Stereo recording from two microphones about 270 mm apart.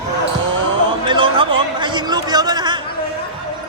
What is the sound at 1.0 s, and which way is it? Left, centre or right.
A man's voice, centre.